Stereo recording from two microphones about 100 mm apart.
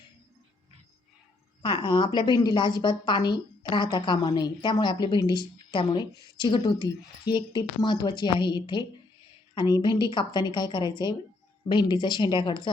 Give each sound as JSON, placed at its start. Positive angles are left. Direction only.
{"t": 1.6, "sound": "a woman's voice", "side_deg": 55}